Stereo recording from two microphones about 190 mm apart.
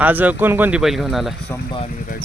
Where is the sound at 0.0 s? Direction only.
10° right (ahead or behind).